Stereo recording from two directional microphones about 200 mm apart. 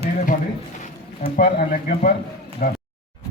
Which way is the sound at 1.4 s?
45° left (ahead or behind).